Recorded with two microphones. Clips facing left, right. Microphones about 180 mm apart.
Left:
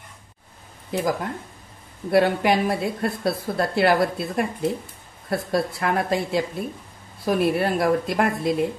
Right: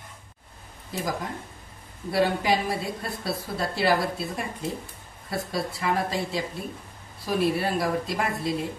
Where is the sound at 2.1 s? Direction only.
55° left (ahead or behind).